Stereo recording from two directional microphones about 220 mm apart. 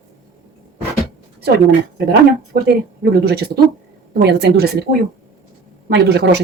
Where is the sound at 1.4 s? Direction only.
45° right (ahead or behind).